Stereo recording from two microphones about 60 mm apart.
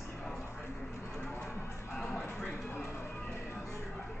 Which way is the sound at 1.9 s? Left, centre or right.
Centre.